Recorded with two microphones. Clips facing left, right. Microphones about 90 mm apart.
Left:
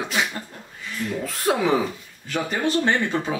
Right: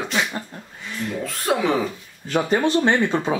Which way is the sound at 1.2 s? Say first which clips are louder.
Even; centre (ahead or behind).